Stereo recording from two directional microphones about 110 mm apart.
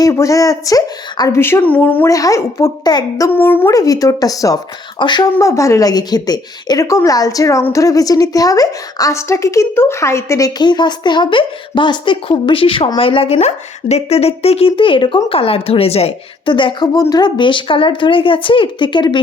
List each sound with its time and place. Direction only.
0.0 s a woman's voice: 30° left (ahead or behind)
1.4 s a woman's voice: 20° left (ahead or behind)
2.0 s a woman's voice: 30° left (ahead or behind)
3.2 s a woman's voice: 20° left (ahead or behind)
3.7 s a woman's voice: 30° left (ahead or behind)
4.9 s speech: 45° left (ahead or behind)
5.4 s a woman's voice: 30° left (ahead or behind)
10.6 s speech: 40° left (ahead or behind); by 16.1 s 65° left (ahead or behind)
16.5 s speech: 45° left (ahead or behind)